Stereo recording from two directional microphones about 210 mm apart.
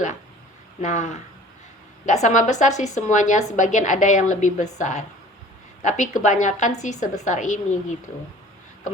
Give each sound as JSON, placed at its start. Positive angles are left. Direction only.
{"t": 0.8, "sound": "a woman's voice", "side_deg": 35}